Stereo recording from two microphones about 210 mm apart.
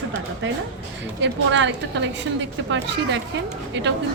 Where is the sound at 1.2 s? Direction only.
60° right (ahead or behind).